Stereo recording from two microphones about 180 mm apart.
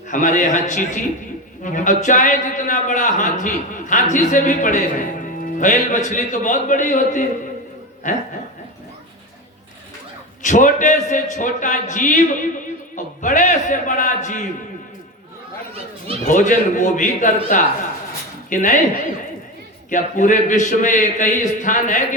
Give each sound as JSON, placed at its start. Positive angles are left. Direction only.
{"t": 0.1, "sound": "a man's voice", "side_deg": 45}
{"t": 10.4, "sound": "a man's voice", "side_deg": 45}
{"t": 13.2, "sound": "a man's voice", "side_deg": 45}
{"t": 16.2, "sound": "a man's voice", "side_deg": 45}
{"t": 19.9, "sound": "a man's voice", "side_deg": 45}